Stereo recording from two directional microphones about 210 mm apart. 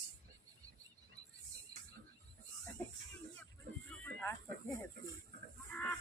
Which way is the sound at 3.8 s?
10° left (ahead or behind).